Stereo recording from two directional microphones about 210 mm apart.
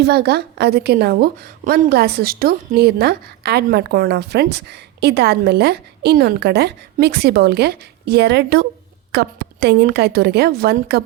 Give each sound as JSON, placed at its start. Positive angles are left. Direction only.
{"t": 0.0, "sound": "a woman's voice", "side_deg": -50}